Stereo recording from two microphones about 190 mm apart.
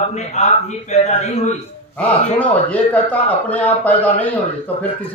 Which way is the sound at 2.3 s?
10° left (ahead or behind).